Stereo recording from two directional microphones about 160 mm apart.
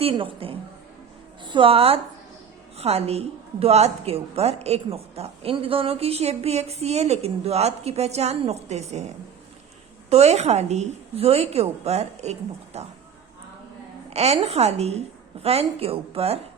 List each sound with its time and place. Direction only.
0.0 s a woman's voice: 35° right (ahead or behind)
10.1 s a woman's voice: 40° right (ahead or behind)
14.1 s a woman's voice: 40° right (ahead or behind)